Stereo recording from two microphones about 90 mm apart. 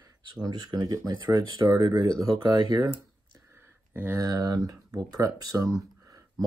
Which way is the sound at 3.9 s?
25° right (ahead or behind).